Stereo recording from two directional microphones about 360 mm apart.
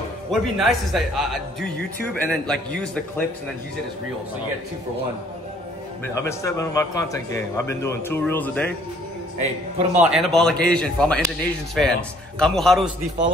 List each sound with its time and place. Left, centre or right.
0.3 s speech: centre
6.1 s a man's voice: centre
9.4 s a man's voice: centre
10.1 s speech: centre